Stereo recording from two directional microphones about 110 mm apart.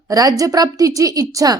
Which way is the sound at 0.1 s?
35° right (ahead or behind).